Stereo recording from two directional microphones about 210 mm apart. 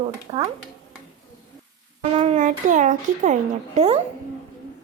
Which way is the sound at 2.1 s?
30° right (ahead or behind).